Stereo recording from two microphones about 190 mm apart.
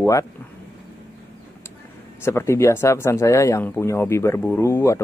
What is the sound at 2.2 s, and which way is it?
Speech, 15° left (ahead or behind).